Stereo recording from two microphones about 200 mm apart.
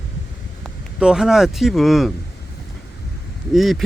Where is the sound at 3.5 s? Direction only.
Centre (ahead or behind).